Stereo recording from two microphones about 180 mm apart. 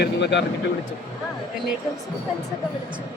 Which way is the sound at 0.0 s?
75° left (ahead or behind).